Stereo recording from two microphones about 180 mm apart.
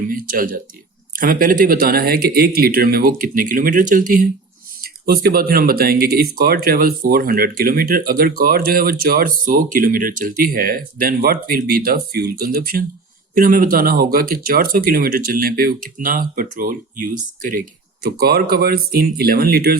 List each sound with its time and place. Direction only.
0.1 s speech: 50° right (ahead or behind)
18.0 s speech: 60° right (ahead or behind)